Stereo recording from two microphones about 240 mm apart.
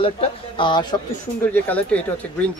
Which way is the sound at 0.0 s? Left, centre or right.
Left.